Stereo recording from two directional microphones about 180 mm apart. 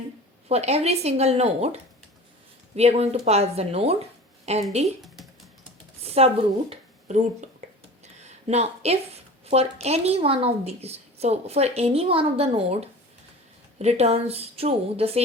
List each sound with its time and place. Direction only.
0.4 s a woman's voice: 35° right (ahead or behind)
4.9 s typing: centre (ahead or behind)
6.1 s speech: 35° right (ahead or behind)
8.0 s a sound: 40° right (ahead or behind)
9.5 s a woman's voice: 35° right (ahead or behind)